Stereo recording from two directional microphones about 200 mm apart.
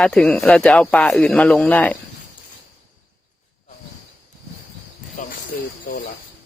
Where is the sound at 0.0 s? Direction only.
5° left (ahead or behind).